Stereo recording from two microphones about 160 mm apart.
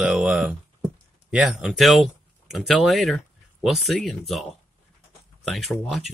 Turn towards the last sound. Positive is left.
turn(degrees=0)  # may be behind; listen again after turning